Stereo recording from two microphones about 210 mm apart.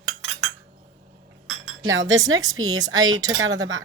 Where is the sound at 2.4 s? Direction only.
20° right (ahead or behind).